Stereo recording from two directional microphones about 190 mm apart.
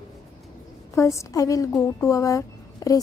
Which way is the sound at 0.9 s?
15° left (ahead or behind).